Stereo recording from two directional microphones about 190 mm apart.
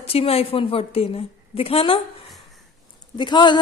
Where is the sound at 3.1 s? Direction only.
25° left (ahead or behind).